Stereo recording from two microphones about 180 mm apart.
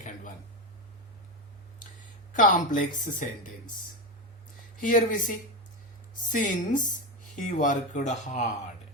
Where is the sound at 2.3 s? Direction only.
45° left (ahead or behind).